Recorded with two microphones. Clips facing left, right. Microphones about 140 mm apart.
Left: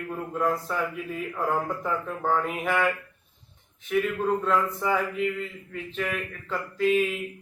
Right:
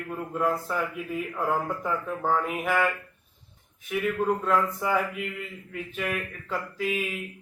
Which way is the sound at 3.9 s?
10° right (ahead or behind).